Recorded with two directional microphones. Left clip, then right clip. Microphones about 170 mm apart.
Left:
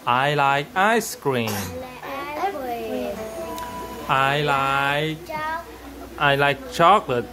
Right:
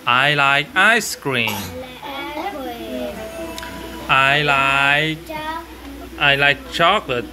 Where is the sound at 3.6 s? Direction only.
30° left (ahead or behind).